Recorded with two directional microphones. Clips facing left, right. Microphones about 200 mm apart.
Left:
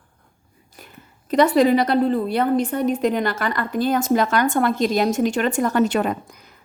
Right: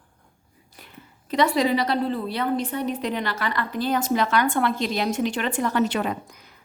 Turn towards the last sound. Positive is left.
turn(degrees=45)  # may be behind; listen again after turning